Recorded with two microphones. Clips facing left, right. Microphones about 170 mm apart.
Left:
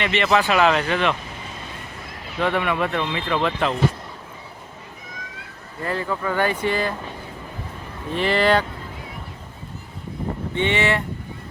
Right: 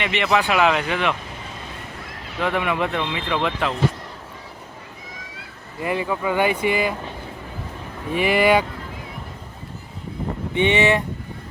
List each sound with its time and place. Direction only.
0.0 s speech: 15° right (ahead or behind)
2.4 s speech: 10° right (ahead or behind)
5.8 s speech: 15° right (ahead or behind)
8.1 s speech: 10° right (ahead or behind)
10.5 s speech: 15° right (ahead or behind)